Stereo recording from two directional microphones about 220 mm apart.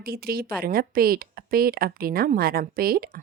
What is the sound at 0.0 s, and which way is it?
A woman's voice, 45° right (ahead or behind).